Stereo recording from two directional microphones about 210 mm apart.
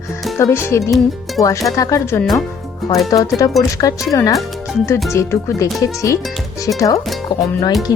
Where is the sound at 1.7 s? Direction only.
15° left (ahead or behind).